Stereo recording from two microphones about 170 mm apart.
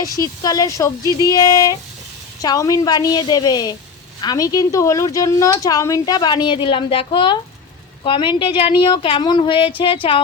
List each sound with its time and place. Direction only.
0.0 s speech: 20° left (ahead or behind)